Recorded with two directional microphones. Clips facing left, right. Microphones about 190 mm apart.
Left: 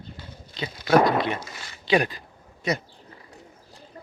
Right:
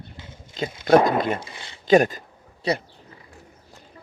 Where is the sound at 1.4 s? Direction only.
25° right (ahead or behind).